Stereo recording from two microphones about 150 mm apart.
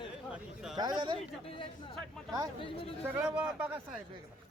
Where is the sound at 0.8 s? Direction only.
30° right (ahead or behind).